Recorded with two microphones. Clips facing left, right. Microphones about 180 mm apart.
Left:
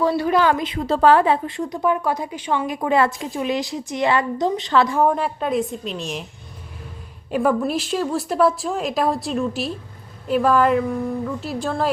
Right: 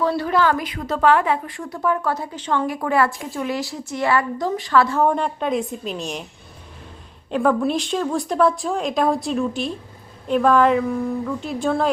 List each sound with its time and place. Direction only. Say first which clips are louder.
0.2 s a woman's voice: left 1 dB; 15° left (ahead or behind)
5.0 s a woman's voice: even; 5° left (ahead or behind)
7.3 s a woman's voice: right 1 dB; 5° left (ahead or behind)